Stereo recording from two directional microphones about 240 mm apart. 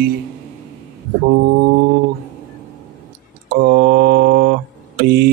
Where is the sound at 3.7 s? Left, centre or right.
Right.